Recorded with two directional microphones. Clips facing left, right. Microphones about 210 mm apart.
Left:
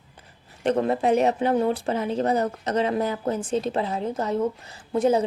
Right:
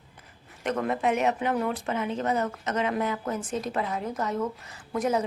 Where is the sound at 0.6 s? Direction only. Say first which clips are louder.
Left 5 dB; 30° left (ahead or behind).